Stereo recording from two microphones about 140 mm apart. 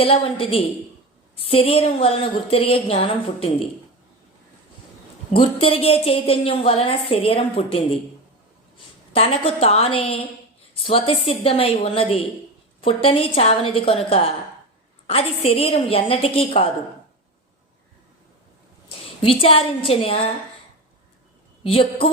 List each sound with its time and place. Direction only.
0.0 s a woman's voice: 40° left (ahead or behind)
5.3 s a woman's voice: 40° left (ahead or behind)
9.1 s a woman's voice: 45° left (ahead or behind)
18.9 s a woman's voice: 40° left (ahead or behind)
21.6 s a woman's voice: 40° left (ahead or behind)